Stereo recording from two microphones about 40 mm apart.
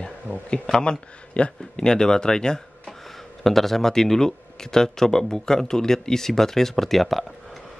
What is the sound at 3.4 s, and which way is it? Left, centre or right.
Speech, centre.